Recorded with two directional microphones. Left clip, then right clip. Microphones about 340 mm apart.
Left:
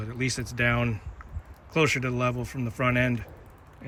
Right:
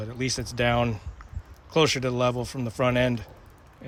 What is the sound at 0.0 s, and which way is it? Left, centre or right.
Speech, centre.